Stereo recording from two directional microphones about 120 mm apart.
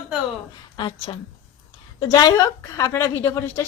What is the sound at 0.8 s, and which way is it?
A woman's voice, 40° left (ahead or behind).